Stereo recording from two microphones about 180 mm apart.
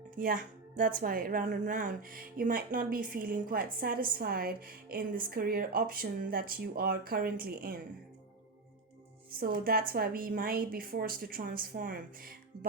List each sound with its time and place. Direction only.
0.2 s speech: 50° right (ahead or behind)
9.4 s speech: 55° right (ahead or behind)